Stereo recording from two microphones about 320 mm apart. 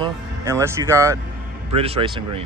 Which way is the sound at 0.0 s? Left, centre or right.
Centre.